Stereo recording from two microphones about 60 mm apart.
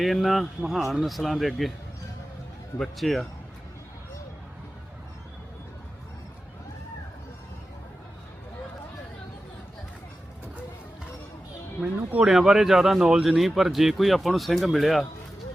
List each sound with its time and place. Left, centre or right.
0.0 s speech: centre
3.0 s speech: centre
11.8 s speech: centre
12.3 s speech: centre